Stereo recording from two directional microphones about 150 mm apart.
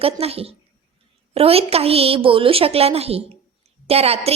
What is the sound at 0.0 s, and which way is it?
A woman's voice, 40° right (ahead or behind).